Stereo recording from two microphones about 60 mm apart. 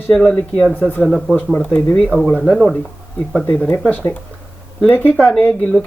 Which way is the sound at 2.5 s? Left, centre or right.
Centre.